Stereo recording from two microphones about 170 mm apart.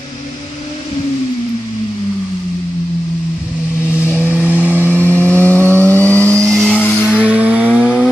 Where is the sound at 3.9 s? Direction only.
10° left (ahead or behind).